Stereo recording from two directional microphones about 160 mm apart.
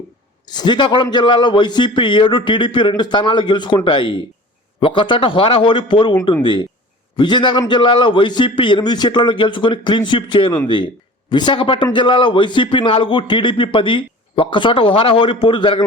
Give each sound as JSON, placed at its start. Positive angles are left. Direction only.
{"t": 0.4, "sound": "a man's voice", "side_deg": 25}